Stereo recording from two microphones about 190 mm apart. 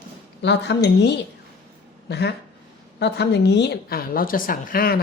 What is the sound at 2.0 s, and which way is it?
A woman's voice, 60° left (ahead or behind).